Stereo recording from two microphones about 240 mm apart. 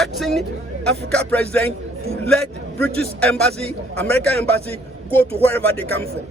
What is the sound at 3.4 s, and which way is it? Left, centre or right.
Speech, centre.